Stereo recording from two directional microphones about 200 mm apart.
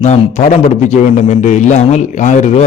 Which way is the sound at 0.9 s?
35° left (ahead or behind).